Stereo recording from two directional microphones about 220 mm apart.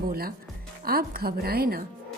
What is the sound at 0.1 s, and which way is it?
A woman's voice, 45° right (ahead or behind).